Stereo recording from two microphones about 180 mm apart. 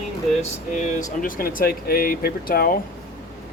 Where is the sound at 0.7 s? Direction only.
45° left (ahead or behind).